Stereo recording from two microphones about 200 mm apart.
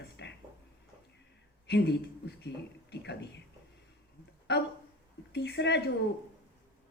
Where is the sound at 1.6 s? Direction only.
55° left (ahead or behind).